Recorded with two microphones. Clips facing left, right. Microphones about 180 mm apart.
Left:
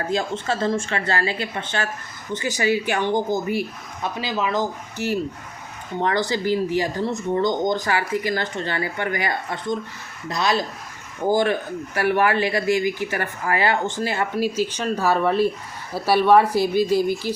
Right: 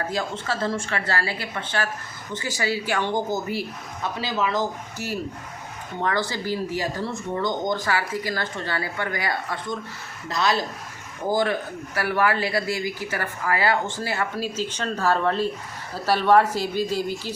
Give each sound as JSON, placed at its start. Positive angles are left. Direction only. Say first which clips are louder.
{"t": 0.1, "sound": "speech", "louder": "left 4 dB", "side_deg": 25}
{"t": 6.3, "sound": "speech", "louder": "left 6 dB", "side_deg": 20}
{"t": 11.9, "sound": "speech", "louder": "left 3 dB", "side_deg": 25}